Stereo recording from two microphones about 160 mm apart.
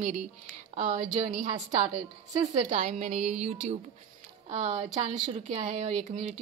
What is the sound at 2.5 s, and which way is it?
A woman's voice, 40° right (ahead or behind).